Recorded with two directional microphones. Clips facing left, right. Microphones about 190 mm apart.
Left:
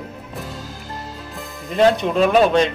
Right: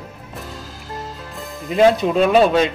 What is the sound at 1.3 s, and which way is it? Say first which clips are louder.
Speech: right 3 dB; centre (ahead or behind).